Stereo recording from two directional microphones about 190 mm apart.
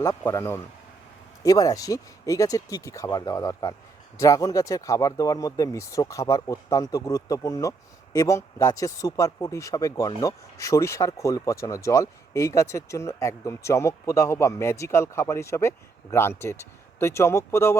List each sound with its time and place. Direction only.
0.2 s speech: 15° left (ahead or behind)